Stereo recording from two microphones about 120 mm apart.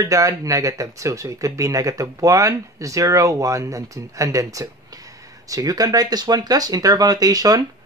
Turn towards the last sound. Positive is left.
turn(degrees=-30)  # may be behind; listen again after turning